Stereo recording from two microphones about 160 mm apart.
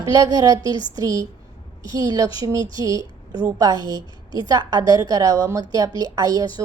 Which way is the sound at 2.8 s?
20° right (ahead or behind).